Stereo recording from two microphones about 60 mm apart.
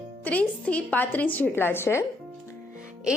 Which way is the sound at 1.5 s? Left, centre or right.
Left.